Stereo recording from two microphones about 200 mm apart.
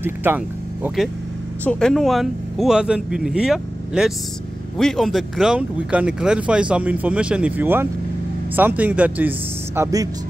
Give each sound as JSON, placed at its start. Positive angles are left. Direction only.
{"t": 0.0, "sound": "speech", "side_deg": -10}